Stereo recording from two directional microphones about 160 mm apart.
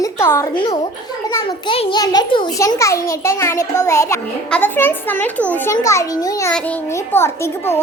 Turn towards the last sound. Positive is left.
turn(degrees=15)  # may be behind; listen again after turning